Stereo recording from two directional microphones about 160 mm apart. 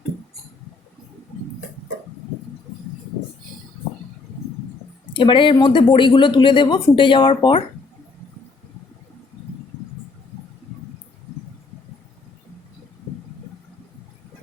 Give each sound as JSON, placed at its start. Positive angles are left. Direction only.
{"t": 5.1, "sound": "speech", "side_deg": 30}